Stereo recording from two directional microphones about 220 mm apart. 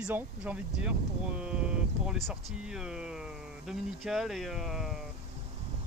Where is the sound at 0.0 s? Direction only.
5° right (ahead or behind).